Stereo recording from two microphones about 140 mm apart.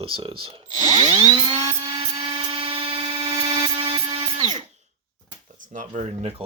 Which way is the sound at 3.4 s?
35° right (ahead or behind).